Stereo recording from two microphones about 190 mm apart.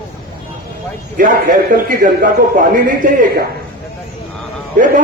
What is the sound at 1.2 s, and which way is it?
A man's voice, 45° right (ahead or behind).